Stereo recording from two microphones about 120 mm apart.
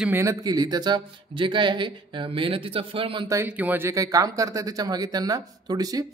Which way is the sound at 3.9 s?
30° right (ahead or behind).